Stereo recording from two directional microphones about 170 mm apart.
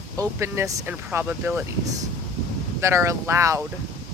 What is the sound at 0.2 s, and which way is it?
Speech, 15° right (ahead or behind).